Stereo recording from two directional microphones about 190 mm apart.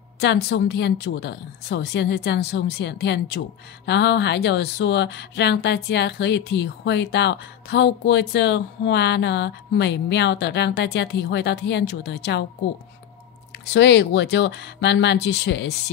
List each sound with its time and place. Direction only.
0.2 s a woman's voice: 65° left (ahead or behind)
13.7 s a woman's voice: 65° left (ahead or behind)